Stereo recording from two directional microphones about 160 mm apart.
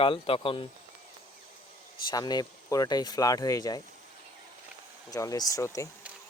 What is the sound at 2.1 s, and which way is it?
Speech, 25° left (ahead or behind).